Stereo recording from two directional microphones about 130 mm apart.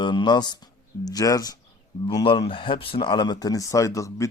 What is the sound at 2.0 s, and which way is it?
Speech, 40° left (ahead or behind).